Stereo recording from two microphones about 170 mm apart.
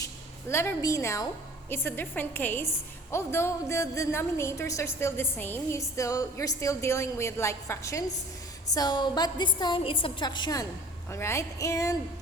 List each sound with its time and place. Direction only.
0.0 s a woman's voice: 15° left (ahead or behind)